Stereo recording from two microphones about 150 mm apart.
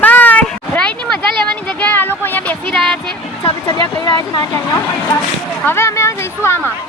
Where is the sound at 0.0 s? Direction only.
10° left (ahead or behind).